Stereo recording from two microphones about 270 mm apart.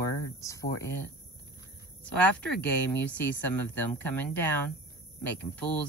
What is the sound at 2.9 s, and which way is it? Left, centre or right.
Speech, centre.